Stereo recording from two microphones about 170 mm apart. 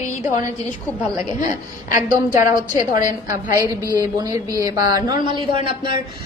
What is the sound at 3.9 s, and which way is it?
A woman's voice, 25° right (ahead or behind).